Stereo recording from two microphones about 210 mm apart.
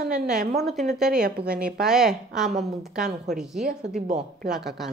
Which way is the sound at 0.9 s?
5° right (ahead or behind).